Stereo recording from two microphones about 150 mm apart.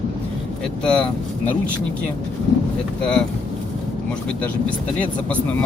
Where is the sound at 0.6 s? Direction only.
5° left (ahead or behind).